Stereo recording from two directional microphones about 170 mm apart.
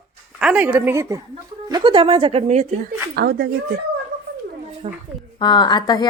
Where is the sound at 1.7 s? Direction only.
30° right (ahead or behind).